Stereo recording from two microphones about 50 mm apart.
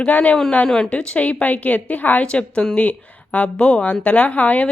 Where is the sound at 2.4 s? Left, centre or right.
Left.